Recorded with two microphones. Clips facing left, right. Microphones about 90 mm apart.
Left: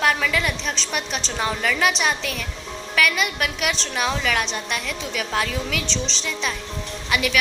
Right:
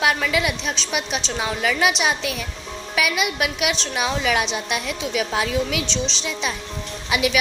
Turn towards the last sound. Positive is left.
turn(degrees=-15)  # may be behind; listen again after turning